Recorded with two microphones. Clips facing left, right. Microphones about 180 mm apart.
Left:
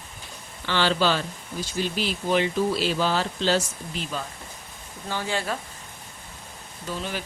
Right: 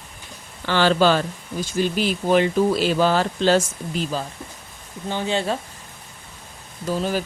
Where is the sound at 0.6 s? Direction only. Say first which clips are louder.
Right 6 dB; 45° right (ahead or behind).